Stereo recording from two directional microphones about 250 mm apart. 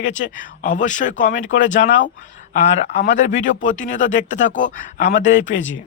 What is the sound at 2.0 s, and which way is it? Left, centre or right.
Speech, left.